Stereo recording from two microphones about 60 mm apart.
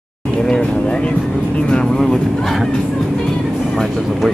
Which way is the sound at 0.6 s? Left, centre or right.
Centre.